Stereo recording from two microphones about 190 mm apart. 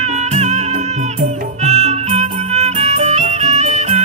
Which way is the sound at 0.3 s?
35° right (ahead or behind).